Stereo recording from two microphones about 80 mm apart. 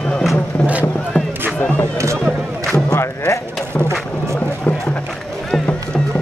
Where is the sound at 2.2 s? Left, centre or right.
Centre.